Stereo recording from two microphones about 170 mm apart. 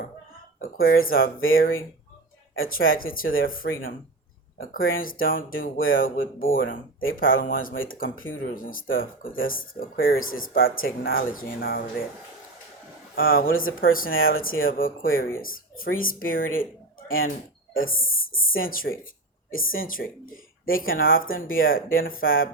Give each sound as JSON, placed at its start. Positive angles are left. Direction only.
{"t": 0.9, "sound": "speech", "side_deg": 60}
{"t": 13.1, "sound": "speech", "side_deg": 60}
{"t": 17.7, "sound": "speech", "side_deg": 55}